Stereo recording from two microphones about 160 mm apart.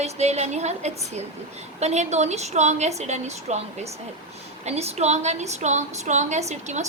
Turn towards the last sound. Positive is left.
turn(degrees=-45)  # may be behind; listen again after turning